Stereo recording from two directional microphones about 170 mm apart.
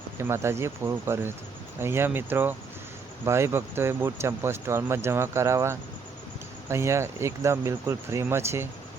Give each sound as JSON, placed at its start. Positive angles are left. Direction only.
{"t": 0.2, "sound": "speech", "side_deg": -15}